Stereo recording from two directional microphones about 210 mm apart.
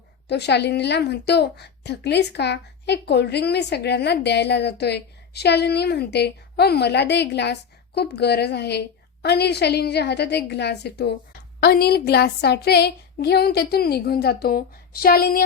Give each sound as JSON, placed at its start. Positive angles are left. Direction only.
{"t": 0.3, "sound": "a woman's voice", "side_deg": 55}